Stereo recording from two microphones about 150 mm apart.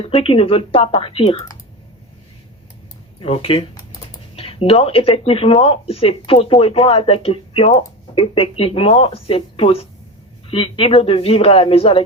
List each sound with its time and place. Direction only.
0.0 s speech: 40° left (ahead or behind)
3.2 s speech: 40° left (ahead or behind)